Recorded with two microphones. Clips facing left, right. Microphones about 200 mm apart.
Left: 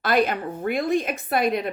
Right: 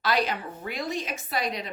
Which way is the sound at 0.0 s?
50° left (ahead or behind).